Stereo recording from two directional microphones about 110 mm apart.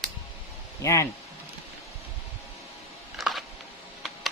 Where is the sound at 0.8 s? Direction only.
30° left (ahead or behind).